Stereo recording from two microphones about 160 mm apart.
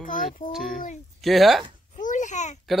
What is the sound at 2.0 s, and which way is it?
Babbling, 50° left (ahead or behind).